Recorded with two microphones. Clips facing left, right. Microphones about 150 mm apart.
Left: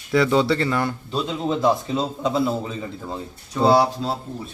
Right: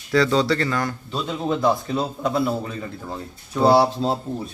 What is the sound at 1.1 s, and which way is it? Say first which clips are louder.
Speech: left 1 dB; centre (ahead or behind).